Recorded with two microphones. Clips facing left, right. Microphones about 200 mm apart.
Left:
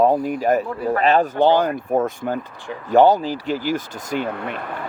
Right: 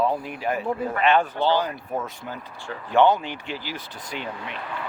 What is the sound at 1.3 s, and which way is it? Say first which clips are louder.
Speech: left 7 dB; 50° left (ahead or behind).